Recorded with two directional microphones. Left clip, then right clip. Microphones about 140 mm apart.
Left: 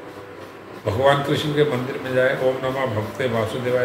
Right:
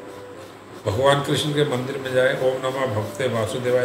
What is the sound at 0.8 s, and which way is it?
A man's voice, 30° right (ahead or behind).